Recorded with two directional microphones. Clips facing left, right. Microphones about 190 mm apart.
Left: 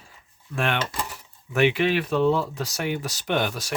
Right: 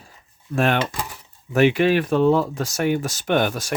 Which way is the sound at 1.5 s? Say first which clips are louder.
Right 4 dB; 45° right (ahead or behind).